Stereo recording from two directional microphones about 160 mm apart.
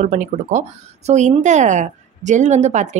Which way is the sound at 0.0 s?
50° right (ahead or behind).